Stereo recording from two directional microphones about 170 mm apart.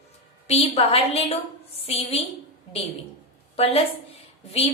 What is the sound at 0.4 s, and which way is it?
A woman's voice, 40° left (ahead or behind).